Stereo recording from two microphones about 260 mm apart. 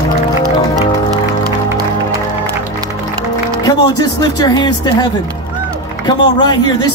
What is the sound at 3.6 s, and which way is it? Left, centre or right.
Music, centre.